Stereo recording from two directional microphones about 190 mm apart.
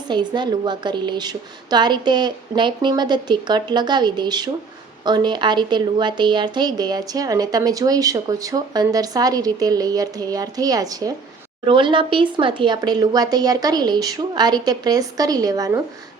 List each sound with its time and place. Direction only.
0.1 s a woman's voice: 25° right (ahead or behind)